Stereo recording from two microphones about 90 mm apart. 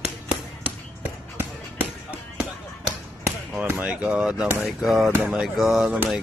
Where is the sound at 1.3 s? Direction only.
20° right (ahead or behind).